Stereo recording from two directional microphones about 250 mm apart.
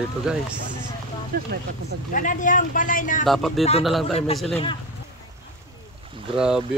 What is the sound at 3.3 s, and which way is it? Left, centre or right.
Speech, centre.